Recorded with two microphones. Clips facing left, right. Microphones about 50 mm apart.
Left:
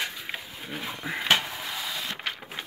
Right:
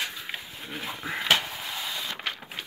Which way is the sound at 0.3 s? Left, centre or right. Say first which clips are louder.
Left 1 dB; left.